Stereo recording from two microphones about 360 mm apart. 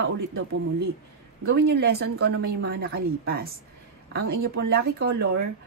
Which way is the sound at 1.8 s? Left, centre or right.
Right.